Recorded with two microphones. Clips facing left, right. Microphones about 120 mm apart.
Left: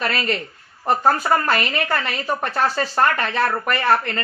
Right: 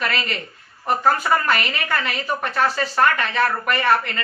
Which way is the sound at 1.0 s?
35° left (ahead or behind).